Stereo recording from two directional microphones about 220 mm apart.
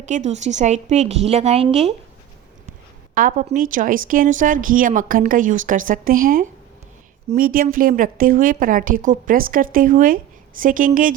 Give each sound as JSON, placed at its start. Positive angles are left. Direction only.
{"t": 0.0, "sound": "a woman's voice", "side_deg": -35}
{"t": 3.2, "sound": "a woman's voice", "side_deg": -35}